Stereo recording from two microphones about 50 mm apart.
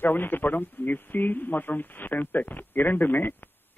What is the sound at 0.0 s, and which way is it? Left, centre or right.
Speech, left.